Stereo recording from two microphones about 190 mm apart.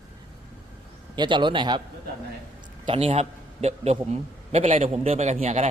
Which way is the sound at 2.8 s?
30° right (ahead or behind).